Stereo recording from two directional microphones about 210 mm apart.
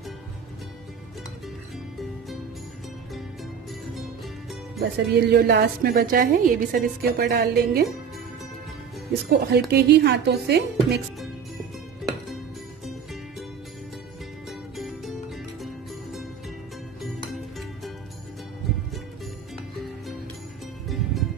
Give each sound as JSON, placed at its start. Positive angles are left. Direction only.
{"t": 4.7, "sound": "a woman's voice", "side_deg": -50}
{"t": 9.3, "sound": "a woman's voice", "side_deg": -50}
{"t": 12.0, "sound": "music", "side_deg": 0}
{"t": 14.8, "sound": "music", "side_deg": 0}
{"t": 20.9, "sound": "music", "side_deg": 0}